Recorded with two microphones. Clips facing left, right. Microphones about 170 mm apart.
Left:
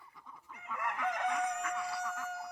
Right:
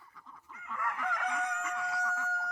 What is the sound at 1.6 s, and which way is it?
Crowing, 5° left (ahead or behind).